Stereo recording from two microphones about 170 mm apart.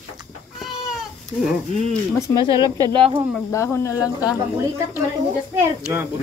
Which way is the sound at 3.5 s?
15° left (ahead or behind).